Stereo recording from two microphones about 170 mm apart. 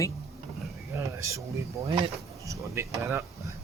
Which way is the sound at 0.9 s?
15° right (ahead or behind).